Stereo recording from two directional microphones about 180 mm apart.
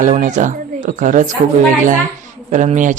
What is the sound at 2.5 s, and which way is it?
Speech, 40° right (ahead or behind).